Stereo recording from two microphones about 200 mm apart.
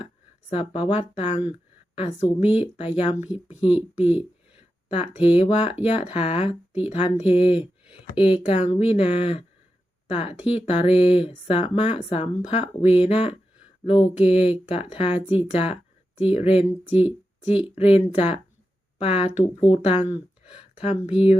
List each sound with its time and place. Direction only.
0.5 s speech: 30° left (ahead or behind)